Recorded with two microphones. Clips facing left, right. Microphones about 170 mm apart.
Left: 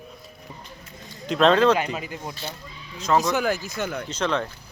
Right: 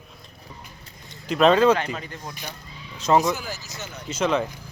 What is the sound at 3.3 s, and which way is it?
Speech, 60° left (ahead or behind).